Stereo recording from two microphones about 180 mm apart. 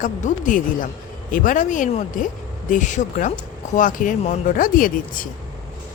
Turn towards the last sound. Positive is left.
turn(degrees=50)  # may be behind; listen again after turning